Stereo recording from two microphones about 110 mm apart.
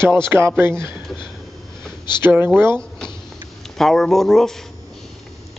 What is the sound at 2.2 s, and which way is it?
Speech, 20° right (ahead or behind).